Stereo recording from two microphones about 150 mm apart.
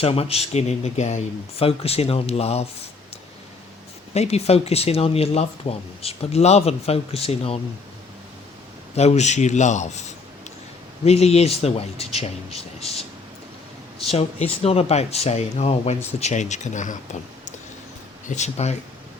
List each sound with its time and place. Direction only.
0.0 s speech: 40° left (ahead or behind)
4.1 s speech: 45° left (ahead or behind)
9.0 s speech: 45° left (ahead or behind)
18.3 s speech: 50° left (ahead or behind)